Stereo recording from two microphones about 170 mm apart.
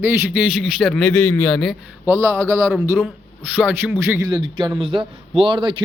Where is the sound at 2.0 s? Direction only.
15° right (ahead or behind).